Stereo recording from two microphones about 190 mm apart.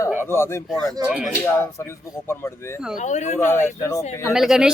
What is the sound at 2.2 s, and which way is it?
Speech, 15° left (ahead or behind).